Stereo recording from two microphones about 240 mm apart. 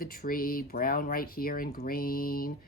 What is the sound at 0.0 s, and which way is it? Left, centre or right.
Speech, left.